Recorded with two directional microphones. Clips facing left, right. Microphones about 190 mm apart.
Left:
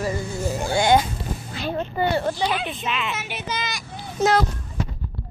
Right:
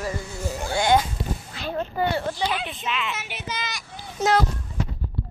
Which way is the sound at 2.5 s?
50° left (ahead or behind).